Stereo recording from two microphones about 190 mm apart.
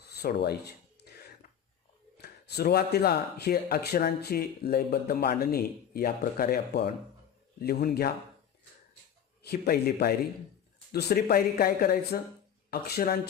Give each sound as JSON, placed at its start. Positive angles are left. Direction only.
{"t": 0.1, "sound": "rub", "side_deg": 60}
{"t": 2.1, "sound": "speech", "side_deg": 60}
{"t": 9.4, "sound": "speech", "side_deg": 55}